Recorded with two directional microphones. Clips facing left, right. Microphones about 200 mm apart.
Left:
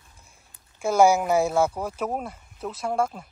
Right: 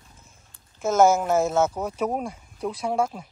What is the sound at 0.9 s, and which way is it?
Speech, 10° left (ahead or behind).